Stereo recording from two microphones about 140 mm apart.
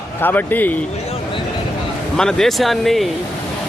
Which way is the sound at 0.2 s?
15° left (ahead or behind).